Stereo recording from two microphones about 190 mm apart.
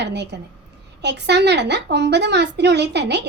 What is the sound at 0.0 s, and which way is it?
A woman's voice, 65° right (ahead or behind).